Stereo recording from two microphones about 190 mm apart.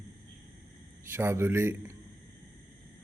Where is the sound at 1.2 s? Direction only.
10° right (ahead or behind).